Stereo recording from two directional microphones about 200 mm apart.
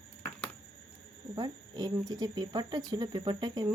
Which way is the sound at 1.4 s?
20° right (ahead or behind).